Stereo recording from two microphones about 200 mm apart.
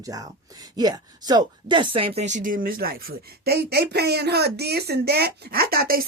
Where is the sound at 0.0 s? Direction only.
20° right (ahead or behind).